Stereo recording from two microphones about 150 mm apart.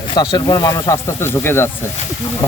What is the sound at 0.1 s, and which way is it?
Speech, 30° left (ahead or behind).